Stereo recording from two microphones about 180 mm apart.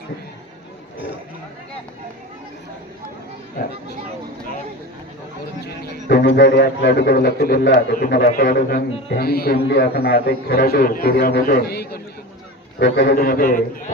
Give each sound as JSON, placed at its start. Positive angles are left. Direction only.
{"t": 5.6, "sound": "a man's voice", "side_deg": 70}
{"t": 12.8, "sound": "a man's voice", "side_deg": 70}